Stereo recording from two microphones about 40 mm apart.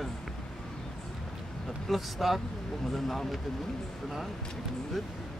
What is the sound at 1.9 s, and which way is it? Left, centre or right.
Speech, centre.